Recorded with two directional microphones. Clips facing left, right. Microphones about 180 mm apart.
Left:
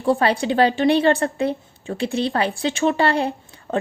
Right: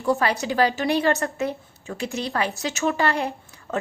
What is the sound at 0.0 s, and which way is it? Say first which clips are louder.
A woman's voice: left 4 dB; 30° left (ahead or behind).